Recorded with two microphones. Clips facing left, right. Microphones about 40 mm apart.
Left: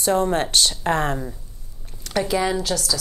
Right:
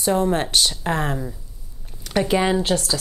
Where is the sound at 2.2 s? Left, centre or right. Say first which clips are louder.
Right 3 dB; right.